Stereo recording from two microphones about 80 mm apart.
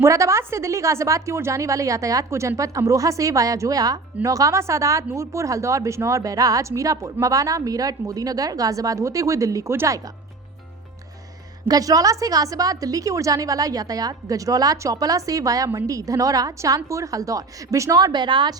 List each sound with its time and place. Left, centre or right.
0.0 s a woman's voice: right
11.7 s a woman's voice: right